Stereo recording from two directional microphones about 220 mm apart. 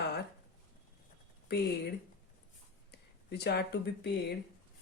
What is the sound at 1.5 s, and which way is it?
Speech, 50° left (ahead or behind).